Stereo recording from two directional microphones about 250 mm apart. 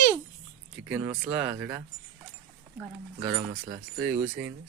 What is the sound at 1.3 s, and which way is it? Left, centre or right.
Speech, centre.